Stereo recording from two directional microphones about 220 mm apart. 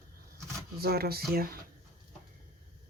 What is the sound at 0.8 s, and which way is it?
Speech, 45° right (ahead or behind).